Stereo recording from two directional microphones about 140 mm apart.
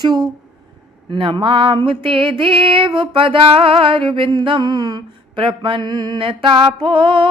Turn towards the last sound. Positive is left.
turn(degrees=-35)  # may be behind; listen again after turning